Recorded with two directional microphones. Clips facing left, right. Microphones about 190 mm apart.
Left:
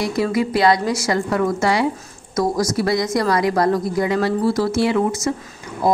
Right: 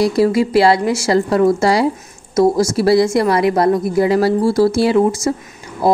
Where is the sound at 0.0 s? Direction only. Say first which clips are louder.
Right 6 dB; 30° right (ahead or behind).